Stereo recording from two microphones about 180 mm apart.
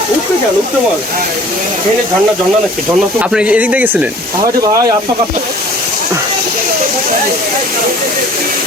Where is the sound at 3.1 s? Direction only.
5° right (ahead or behind).